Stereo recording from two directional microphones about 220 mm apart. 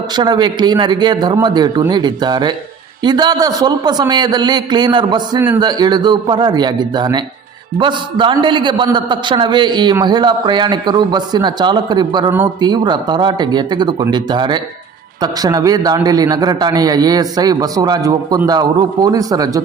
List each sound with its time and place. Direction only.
0.2 s a man's voice: 20° right (ahead or behind)